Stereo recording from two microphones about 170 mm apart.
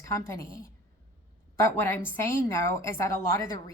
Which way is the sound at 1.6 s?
15° left (ahead or behind).